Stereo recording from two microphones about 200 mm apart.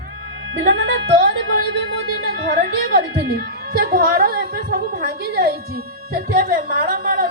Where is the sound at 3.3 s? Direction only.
50° right (ahead or behind).